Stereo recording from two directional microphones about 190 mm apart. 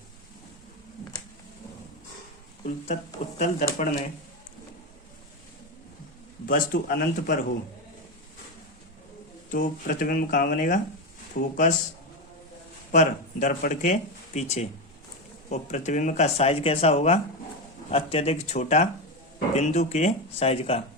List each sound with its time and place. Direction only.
2.6 s speech: 40° left (ahead or behind)
6.4 s speech: 45° left (ahead or behind)
9.5 s speech: 45° left (ahead or behind)
12.9 s speech: 40° left (ahead or behind)